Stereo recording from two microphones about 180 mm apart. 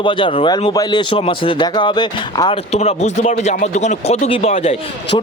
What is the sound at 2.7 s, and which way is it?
Speech, 35° left (ahead or behind).